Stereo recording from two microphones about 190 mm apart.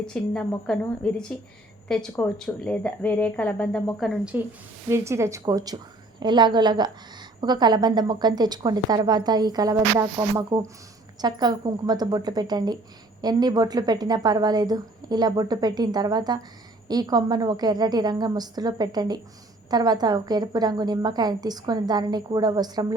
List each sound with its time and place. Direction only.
0.0 s a woman's voice: 5° left (ahead or behind); by 23.0 s 20° right (ahead or behind)